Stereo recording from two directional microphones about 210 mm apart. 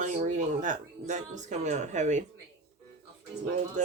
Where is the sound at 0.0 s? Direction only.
35° right (ahead or behind).